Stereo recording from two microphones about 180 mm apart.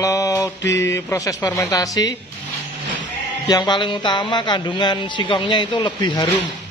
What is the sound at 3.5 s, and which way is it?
A man's voice, 25° left (ahead or behind).